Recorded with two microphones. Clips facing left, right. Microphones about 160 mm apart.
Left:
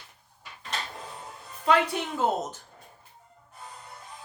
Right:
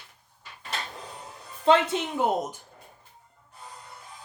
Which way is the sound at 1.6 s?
25° right (ahead or behind).